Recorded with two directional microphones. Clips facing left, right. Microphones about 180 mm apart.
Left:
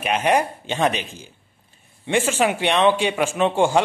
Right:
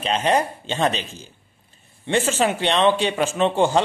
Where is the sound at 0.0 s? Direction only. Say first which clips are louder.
Left 1 dB; 15° left (ahead or behind).